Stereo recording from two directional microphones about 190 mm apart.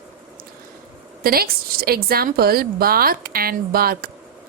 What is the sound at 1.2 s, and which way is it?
A woman's voice, 50° right (ahead or behind).